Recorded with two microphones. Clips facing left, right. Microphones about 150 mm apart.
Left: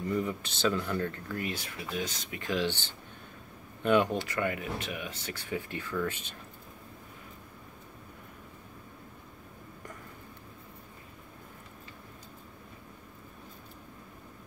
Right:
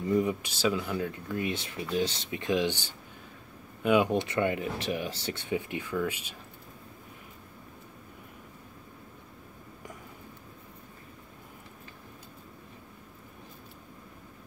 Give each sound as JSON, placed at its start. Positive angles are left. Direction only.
{"t": 0.1, "sound": "speech", "side_deg": -15}